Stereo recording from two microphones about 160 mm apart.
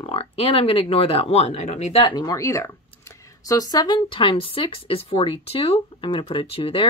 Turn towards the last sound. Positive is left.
turn(degrees=35)  # may be behind; listen again after turning